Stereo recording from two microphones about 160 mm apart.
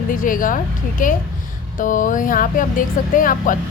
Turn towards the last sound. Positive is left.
turn(degrees=60)  # may be behind; listen again after turning